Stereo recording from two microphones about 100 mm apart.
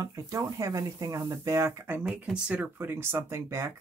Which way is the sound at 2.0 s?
10° right (ahead or behind).